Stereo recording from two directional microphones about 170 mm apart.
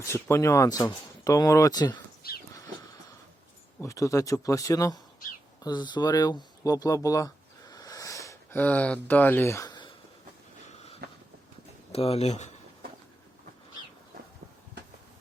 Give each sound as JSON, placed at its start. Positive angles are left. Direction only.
{"t": 0.1, "sound": "speech", "side_deg": 15}
{"t": 2.2, "sound": "crow", "side_deg": 65}
{"t": 3.8, "sound": "speech", "side_deg": 20}
{"t": 11.0, "sound": "a sound", "side_deg": -65}
{"t": 11.9, "sound": "speech", "side_deg": 35}